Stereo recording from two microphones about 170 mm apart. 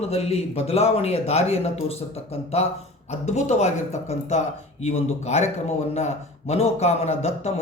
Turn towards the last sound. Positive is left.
turn(degrees=40)  # may be behind; listen again after turning